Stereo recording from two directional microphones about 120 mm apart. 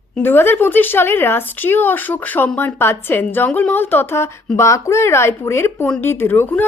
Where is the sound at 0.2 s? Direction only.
20° left (ahead or behind).